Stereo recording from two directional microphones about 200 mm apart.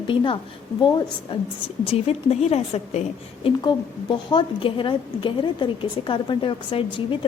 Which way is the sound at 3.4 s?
20° left (ahead or behind).